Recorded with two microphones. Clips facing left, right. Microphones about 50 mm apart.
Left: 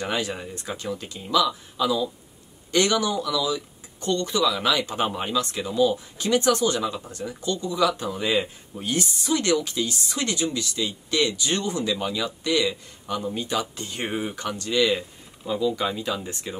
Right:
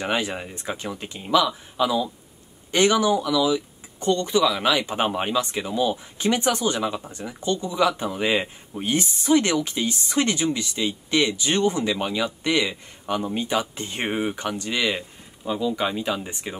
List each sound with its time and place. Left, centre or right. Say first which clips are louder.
0.0 s speech: right 2 dB; right